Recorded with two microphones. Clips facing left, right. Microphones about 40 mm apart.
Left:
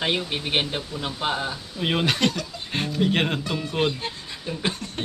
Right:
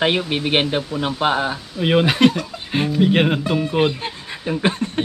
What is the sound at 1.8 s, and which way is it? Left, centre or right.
Speech, centre.